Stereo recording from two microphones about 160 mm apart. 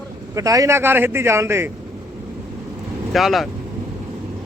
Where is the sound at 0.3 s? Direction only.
20° right (ahead or behind).